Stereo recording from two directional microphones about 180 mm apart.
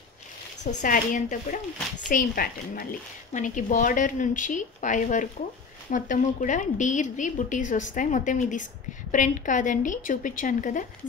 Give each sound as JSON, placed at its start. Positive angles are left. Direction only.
{"t": 0.8, "sound": "a woman's voice", "side_deg": 50}